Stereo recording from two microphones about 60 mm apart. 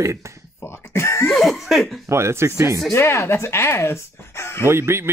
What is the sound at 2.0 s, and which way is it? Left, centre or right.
Speech, right.